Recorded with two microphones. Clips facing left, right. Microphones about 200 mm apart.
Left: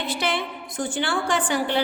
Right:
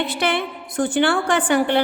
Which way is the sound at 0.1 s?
60° right (ahead or behind).